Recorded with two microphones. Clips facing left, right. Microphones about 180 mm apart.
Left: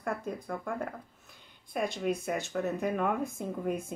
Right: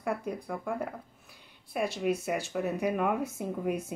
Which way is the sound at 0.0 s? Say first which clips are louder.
Right 2 dB; 10° right (ahead or behind).